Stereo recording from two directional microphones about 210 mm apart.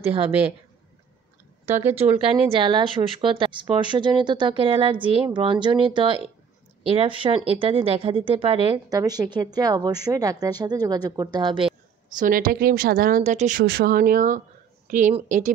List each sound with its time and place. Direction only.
1.7 s speech: 10° right (ahead or behind)
2.1 s speech: 25° right (ahead or behind)
12.2 s a woman's voice: 40° right (ahead or behind)